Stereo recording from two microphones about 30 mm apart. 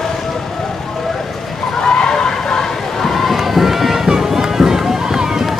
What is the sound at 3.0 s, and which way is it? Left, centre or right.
Crowd, centre.